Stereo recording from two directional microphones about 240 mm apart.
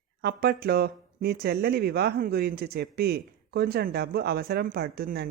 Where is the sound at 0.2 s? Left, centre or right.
Right.